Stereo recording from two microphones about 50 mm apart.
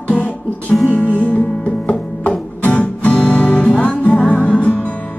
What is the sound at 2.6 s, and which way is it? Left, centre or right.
Music, left.